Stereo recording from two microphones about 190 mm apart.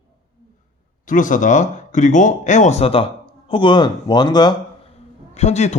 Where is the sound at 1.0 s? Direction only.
45° left (ahead or behind); by 4.5 s 20° left (ahead or behind).